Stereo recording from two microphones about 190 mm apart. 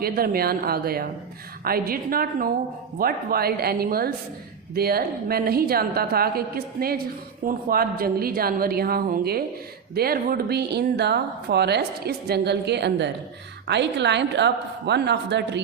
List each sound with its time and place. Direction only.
0.0 s a woman's voice: 55° right (ahead or behind)